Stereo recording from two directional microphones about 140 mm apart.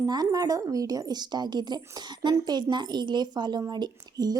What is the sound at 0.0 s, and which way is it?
Speech, 25° right (ahead or behind).